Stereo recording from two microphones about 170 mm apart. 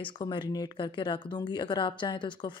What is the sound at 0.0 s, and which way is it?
Speech, 25° left (ahead or behind).